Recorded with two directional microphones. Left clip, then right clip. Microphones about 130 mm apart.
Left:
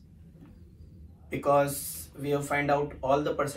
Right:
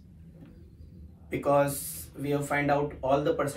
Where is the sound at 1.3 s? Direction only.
Centre (ahead or behind).